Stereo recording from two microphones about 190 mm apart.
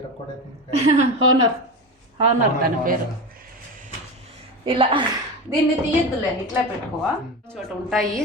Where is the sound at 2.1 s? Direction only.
50° right (ahead or behind).